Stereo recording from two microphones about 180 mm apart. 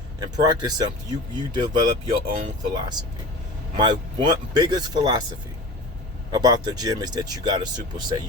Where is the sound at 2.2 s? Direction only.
50° right (ahead or behind).